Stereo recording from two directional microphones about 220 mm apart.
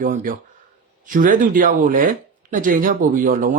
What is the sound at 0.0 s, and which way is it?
Speech, 40° right (ahead or behind).